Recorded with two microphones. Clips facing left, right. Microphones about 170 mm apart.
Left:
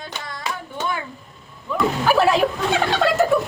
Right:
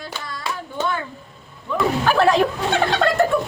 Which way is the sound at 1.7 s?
5° left (ahead or behind).